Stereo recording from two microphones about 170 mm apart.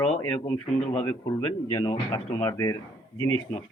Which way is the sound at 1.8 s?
25° left (ahead or behind).